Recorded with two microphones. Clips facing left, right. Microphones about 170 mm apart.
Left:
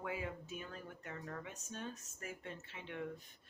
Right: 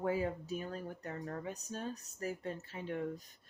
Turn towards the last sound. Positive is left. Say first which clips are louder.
# right 6 dB
turn(degrees=-40)  # may be behind; listen again after turning